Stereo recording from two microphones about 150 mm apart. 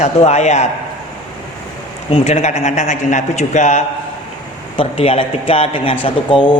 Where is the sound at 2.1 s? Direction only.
45° left (ahead or behind).